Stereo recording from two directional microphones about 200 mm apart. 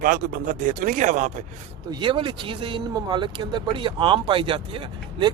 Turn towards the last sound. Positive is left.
turn(degrees=-25)  # may be behind; listen again after turning